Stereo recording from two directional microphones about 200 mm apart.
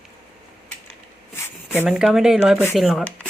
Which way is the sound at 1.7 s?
5° right (ahead or behind).